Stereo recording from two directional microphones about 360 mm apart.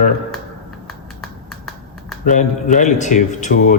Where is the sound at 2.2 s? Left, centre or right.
Left.